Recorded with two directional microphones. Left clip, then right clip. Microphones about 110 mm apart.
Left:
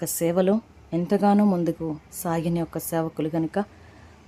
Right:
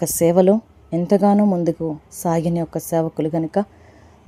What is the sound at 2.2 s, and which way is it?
Speech, 35° right (ahead or behind).